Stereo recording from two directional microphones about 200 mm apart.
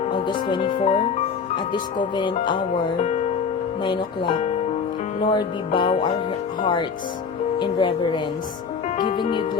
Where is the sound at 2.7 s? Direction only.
35° left (ahead or behind).